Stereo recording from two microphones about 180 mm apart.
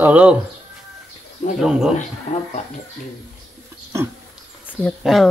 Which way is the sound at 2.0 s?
40° left (ahead or behind).